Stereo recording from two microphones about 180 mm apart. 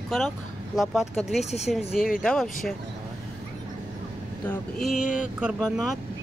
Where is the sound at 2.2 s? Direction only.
Centre (ahead or behind).